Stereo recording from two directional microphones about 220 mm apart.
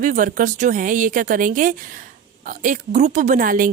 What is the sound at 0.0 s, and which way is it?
A woman's voice, 35° right (ahead or behind).